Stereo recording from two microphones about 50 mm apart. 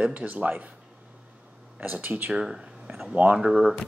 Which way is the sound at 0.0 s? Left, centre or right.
Right.